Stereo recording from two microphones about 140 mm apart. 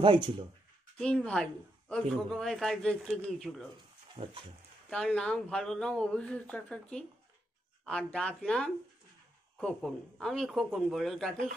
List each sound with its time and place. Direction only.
0.0 s speech: 35° right (ahead or behind)
0.9 s a woman's voice: 5° left (ahead or behind)
4.1 s speech: 40° right (ahead or behind)
4.8 s a woman's voice: 5° left (ahead or behind)